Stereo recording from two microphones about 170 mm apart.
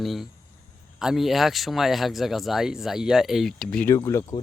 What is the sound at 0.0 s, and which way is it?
Speech, centre (ahead or behind).